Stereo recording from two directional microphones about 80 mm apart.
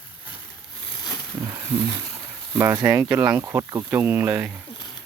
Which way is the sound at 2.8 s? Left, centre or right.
Right.